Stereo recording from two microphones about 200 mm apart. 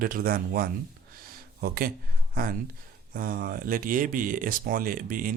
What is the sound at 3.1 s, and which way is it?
Speech, 45° right (ahead or behind).